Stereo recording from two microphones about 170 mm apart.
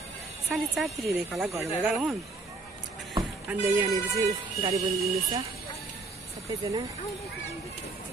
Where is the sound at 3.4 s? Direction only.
10° right (ahead or behind).